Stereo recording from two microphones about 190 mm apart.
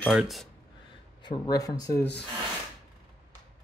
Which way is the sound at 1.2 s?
20° left (ahead or behind).